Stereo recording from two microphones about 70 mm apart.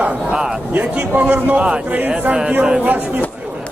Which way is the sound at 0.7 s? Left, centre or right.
Right.